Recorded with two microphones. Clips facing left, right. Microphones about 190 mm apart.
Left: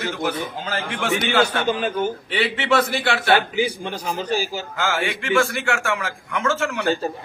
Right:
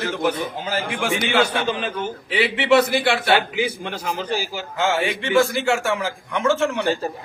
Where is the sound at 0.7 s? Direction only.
10° right (ahead or behind).